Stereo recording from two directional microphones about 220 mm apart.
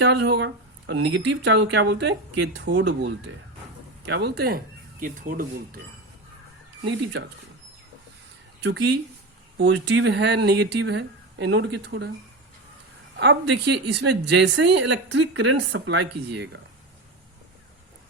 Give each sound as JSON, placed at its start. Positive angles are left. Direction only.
{"t": 0.0, "sound": "speech", "side_deg": -55}
{"t": 6.8, "sound": "speech", "side_deg": -55}
{"t": 8.6, "sound": "speech", "side_deg": -50}
{"t": 13.1, "sound": "speech", "side_deg": -50}